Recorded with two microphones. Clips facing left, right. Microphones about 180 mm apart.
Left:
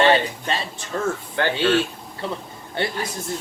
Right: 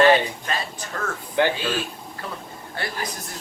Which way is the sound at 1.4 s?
15° right (ahead or behind).